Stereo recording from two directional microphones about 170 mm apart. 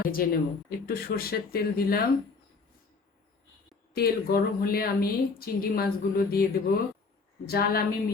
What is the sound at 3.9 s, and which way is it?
Speech, 60° left (ahead or behind).